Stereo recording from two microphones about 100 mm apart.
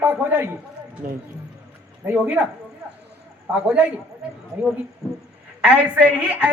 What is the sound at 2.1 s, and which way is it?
Speech, 15° right (ahead or behind).